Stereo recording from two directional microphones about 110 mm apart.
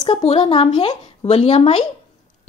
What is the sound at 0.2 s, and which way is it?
Speech, 65° left (ahead or behind).